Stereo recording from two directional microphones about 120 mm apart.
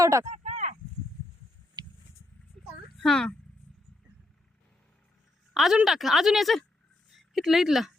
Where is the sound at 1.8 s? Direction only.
35° right (ahead or behind).